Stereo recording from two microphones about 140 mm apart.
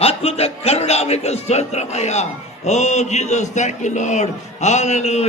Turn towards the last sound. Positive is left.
turn(degrees=50)  # may be behind; listen again after turning